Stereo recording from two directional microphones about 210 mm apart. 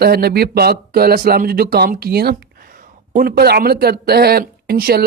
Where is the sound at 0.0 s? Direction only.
50° right (ahead or behind).